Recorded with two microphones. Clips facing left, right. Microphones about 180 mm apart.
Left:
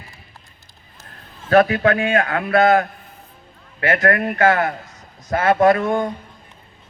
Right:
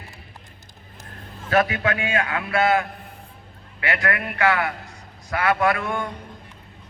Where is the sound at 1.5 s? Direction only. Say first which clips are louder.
Left 7 dB; 40° left (ahead or behind).